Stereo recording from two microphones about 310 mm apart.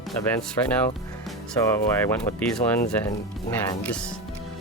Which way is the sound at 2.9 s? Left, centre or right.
Centre.